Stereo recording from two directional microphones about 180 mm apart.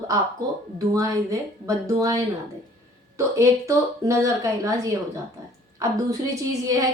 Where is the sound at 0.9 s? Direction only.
20° right (ahead or behind).